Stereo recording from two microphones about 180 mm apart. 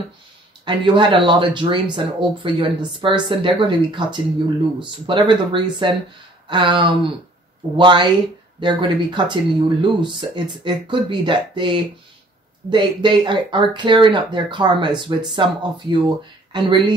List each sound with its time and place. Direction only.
0.7 s speech: 25° right (ahead or behind)